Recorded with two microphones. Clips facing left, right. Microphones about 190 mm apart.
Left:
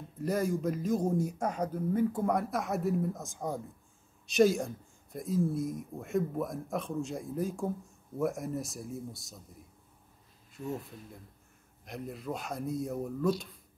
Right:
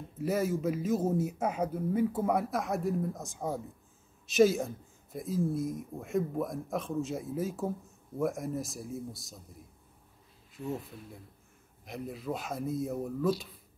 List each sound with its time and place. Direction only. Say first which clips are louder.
0.2 s speech: right 1 dB; 5° right (ahead or behind)
10.5 s speech: right 1 dB; centre (ahead or behind)